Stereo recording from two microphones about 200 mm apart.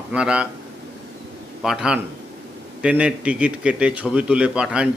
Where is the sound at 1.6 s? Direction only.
5° right (ahead or behind).